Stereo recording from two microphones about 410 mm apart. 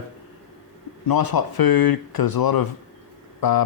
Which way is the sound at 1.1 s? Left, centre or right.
Left.